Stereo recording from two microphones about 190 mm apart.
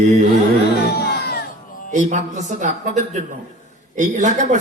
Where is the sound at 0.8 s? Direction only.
55° left (ahead or behind).